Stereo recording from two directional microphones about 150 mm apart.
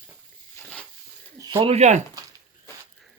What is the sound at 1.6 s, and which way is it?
Speech, 45° right (ahead or behind).